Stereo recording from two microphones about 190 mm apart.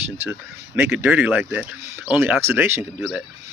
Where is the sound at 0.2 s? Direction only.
10° right (ahead or behind).